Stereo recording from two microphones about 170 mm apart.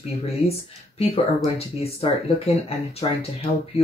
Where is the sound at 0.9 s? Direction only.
35° left (ahead or behind).